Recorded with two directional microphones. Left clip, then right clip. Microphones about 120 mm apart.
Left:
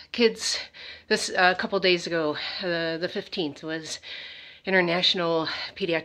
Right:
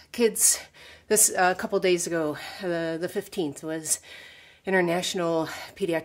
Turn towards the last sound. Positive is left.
turn(degrees=-40)  # may be behind; listen again after turning